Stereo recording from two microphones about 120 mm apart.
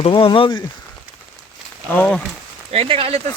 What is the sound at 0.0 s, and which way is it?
Speech, 45° left (ahead or behind).